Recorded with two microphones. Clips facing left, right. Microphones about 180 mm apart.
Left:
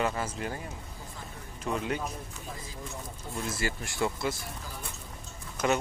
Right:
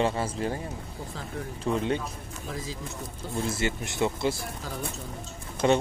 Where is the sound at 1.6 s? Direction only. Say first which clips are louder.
Right 4 dB; 30° right (ahead or behind).